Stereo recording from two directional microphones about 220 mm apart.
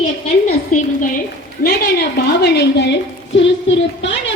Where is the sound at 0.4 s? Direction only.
35° left (ahead or behind).